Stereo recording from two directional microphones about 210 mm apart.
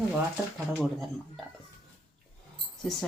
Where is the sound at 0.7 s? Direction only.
Centre (ahead or behind).